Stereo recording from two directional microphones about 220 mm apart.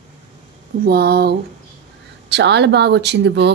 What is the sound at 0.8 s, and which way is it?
Speech, 45° right (ahead or behind).